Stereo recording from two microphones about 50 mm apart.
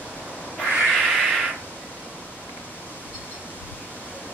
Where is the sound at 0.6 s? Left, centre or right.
Centre.